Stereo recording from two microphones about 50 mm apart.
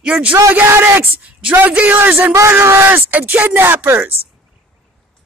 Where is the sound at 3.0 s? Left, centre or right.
Right.